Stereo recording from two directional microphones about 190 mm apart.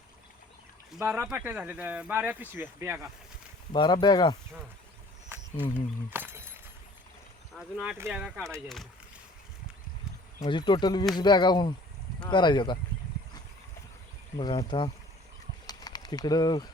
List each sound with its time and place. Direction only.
0.9 s speech: 5° right (ahead or behind)
3.7 s speech: 25° left (ahead or behind)
6.1 s speech: 10° right (ahead or behind)
7.5 s speech: 5° right (ahead or behind)
10.4 s speech: 25° left (ahead or behind)
14.3 s speech: 20° left (ahead or behind)
15.6 s bird: 20° left (ahead or behind)